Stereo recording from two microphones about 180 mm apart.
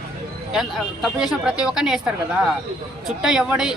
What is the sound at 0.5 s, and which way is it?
A woman's voice, centre (ahead or behind).